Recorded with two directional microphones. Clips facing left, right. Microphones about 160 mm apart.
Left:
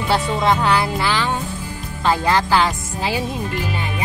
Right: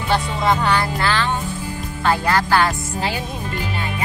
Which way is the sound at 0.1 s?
5° left (ahead or behind).